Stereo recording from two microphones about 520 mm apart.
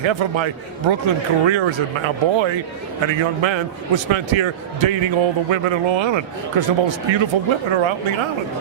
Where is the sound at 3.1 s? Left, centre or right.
Right.